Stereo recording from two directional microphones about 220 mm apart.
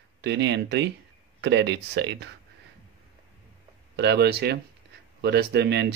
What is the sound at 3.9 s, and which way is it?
Speech, 50° right (ahead or behind).